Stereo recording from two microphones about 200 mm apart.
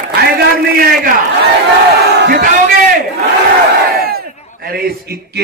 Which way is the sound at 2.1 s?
50° right (ahead or behind).